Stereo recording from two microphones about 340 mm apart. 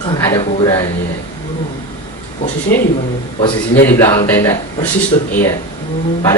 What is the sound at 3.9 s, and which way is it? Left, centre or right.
A man's voice, centre.